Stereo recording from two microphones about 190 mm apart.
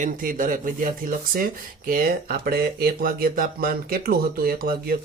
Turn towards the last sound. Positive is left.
turn(degrees=-50)  # may be behind; listen again after turning